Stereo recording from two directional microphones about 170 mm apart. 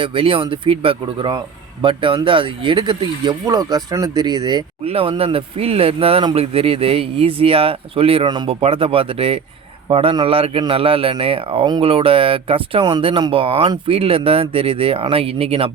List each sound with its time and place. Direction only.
0.0 s speech: 30° right (ahead or behind)